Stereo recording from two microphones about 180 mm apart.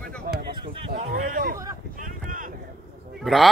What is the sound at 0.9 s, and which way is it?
Speech, 50° right (ahead or behind).